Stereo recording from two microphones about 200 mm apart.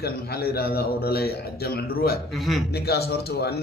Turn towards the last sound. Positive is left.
turn(degrees=50)  # may be behind; listen again after turning